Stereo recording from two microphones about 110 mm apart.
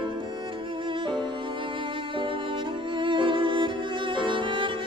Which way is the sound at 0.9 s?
50° right (ahead or behind).